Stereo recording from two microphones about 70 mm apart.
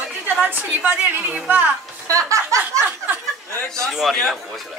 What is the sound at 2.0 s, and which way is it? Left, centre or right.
Music, right.